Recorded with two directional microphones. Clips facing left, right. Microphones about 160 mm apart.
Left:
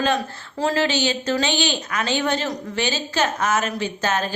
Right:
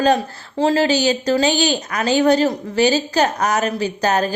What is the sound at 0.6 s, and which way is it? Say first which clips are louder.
Speech: right 5 dB; 25° right (ahead or behind).